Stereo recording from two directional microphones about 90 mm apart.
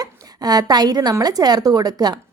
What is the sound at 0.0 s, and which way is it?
A woman's voice, 45° right (ahead or behind).